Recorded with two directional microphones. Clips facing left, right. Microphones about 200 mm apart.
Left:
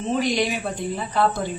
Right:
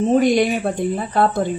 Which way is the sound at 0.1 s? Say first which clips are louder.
Right 5 dB; 50° right (ahead or behind).